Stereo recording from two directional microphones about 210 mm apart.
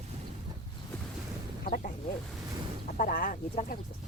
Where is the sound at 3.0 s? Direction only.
40° left (ahead or behind).